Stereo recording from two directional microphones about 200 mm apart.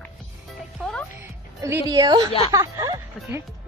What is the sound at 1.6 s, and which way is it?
A woman's voice, 15° right (ahead or behind).